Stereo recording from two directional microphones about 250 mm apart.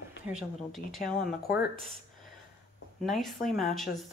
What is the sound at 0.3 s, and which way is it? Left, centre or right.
A woman's voice, centre.